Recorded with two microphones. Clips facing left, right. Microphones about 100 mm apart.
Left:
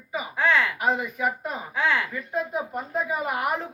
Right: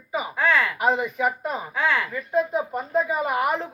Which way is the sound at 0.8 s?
Centre (ahead or behind).